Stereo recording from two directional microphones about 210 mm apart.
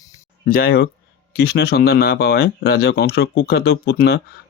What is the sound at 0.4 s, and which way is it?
Speech, 45° left (ahead or behind).